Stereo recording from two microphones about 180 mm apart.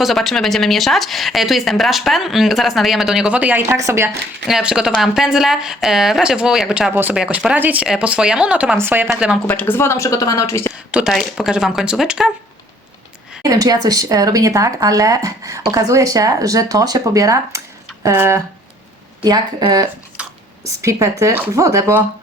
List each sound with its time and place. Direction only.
0.0 s speech: centre (ahead or behind); by 4.2 s 15° right (ahead or behind)
4.4 s speech: 5° right (ahead or behind)
9.5 s speech: 10° left (ahead or behind)
10.9 s speech: centre (ahead or behind)
13.4 s speech: 20° right (ahead or behind)
20.2 s whispering: 5° right (ahead or behind)
20.8 s speech: 15° right (ahead or behind)